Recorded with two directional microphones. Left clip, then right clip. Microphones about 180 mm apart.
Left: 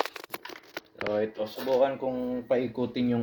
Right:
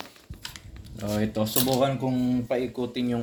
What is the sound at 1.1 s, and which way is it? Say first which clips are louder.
Speech: right 4 dB; 45° left (ahead or behind).